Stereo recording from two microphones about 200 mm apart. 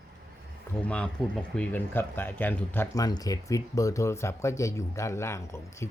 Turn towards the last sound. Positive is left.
turn(degrees=15)  # may be behind; listen again after turning